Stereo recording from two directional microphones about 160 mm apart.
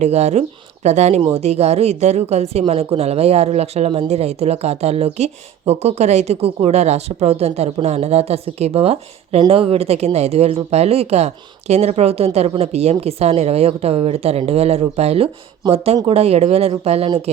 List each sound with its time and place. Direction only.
0.0 s speech: 45° right (ahead or behind)